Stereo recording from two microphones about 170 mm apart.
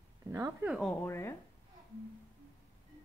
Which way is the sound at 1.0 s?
15° left (ahead or behind).